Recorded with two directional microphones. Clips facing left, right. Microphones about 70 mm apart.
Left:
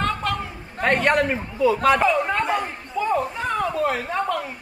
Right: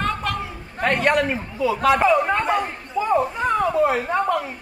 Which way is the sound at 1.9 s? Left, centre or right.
Centre.